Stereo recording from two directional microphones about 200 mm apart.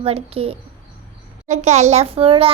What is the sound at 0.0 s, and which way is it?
A child's voice, 30° right (ahead or behind).